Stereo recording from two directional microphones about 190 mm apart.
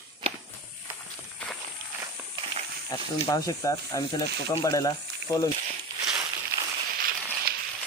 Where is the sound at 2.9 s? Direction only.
20° left (ahead or behind).